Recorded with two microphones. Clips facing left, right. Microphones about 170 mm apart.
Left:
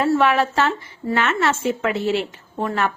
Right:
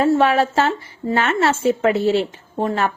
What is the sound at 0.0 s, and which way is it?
A woman's voice, 30° right (ahead or behind).